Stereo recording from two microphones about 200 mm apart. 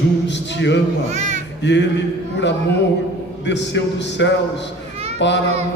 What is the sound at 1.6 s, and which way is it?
Speech, 60° left (ahead or behind).